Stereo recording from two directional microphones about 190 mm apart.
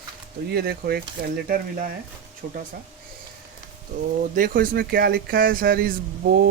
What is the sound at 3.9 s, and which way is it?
Speech, 40° right (ahead or behind).